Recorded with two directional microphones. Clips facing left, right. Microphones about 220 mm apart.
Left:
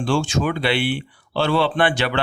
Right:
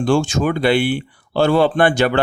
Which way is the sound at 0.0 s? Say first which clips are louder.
Right 4 dB; 45° right (ahead or behind).